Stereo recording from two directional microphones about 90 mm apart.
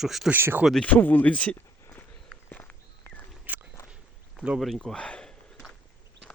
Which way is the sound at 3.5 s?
20° right (ahead or behind).